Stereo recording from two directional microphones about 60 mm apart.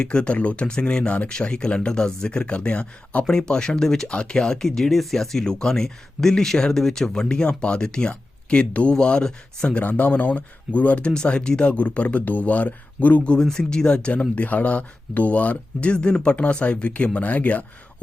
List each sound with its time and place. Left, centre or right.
0.0 s speech: centre
9.8 s speech: left
13.4 s speech: centre; by 17.7 s left